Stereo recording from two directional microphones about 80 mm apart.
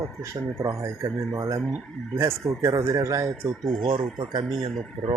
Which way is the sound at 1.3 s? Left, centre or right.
Right.